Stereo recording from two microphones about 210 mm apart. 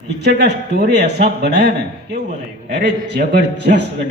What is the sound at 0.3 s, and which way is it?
A man's voice, 55° right (ahead or behind).